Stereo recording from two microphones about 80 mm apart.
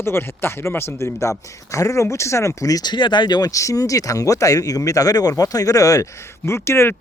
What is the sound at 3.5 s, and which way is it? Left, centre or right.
Speech, left.